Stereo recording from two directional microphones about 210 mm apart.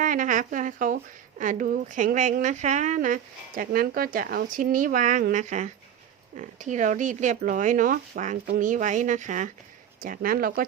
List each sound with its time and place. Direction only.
0.0 s a woman's voice: 40° right (ahead or behind)